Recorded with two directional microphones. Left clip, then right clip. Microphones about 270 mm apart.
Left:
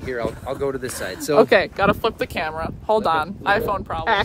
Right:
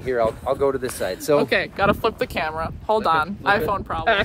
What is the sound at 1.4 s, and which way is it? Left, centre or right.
Speech, centre.